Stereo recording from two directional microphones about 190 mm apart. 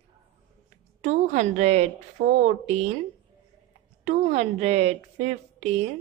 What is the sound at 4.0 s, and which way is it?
A woman's voice, 35° right (ahead or behind).